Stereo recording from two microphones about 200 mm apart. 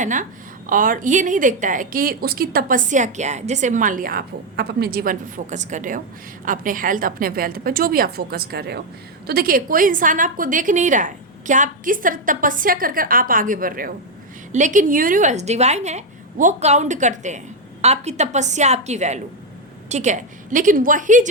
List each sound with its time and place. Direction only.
0.0 s a woman's voice: 40° right (ahead or behind)